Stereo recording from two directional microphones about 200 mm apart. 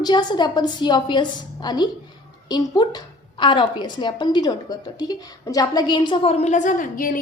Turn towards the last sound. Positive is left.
turn(degrees=40)  # may be behind; listen again after turning